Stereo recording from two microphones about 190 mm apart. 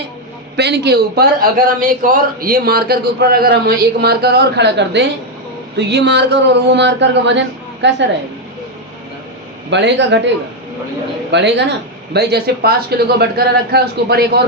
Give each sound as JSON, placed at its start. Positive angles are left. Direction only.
{"t": 0.5, "sound": "a man's voice", "side_deg": -60}
{"t": 9.6, "sound": "a man's voice", "side_deg": -65}
{"t": 11.3, "sound": "a man's voice", "side_deg": -65}